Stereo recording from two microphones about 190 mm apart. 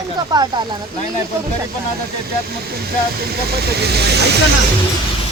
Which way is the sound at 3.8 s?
60° right (ahead or behind).